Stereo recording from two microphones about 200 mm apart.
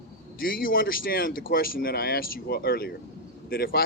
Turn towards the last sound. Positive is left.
turn(degrees=50)  # may be behind; listen again after turning